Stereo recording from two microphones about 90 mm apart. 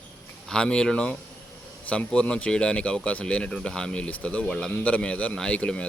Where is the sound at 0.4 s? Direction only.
10° left (ahead or behind).